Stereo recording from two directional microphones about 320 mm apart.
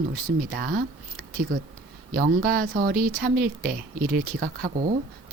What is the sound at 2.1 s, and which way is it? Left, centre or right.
Speech, right.